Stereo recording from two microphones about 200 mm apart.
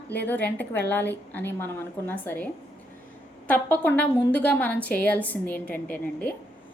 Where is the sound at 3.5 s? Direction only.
10° left (ahead or behind).